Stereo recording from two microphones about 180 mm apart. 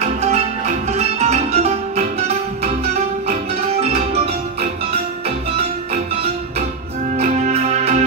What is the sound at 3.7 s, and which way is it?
Music, 35° right (ahead or behind).